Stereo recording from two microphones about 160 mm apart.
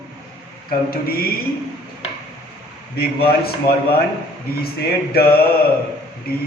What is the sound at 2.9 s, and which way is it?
Speech, 75° left (ahead or behind).